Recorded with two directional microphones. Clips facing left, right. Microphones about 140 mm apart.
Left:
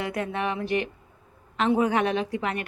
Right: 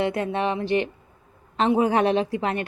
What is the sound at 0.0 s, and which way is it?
Speech, 30° right (ahead or behind).